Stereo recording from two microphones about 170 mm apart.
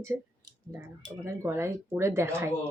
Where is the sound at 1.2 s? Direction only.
15° right (ahead or behind).